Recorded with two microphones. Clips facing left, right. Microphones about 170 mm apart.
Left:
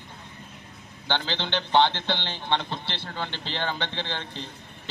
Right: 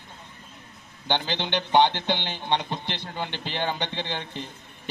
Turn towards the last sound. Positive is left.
turn(degrees=-15)  # may be behind; listen again after turning